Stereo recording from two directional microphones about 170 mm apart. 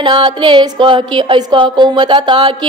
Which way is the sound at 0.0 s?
30° right (ahead or behind).